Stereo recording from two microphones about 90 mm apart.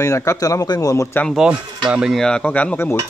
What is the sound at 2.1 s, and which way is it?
Speech, 10° left (ahead or behind).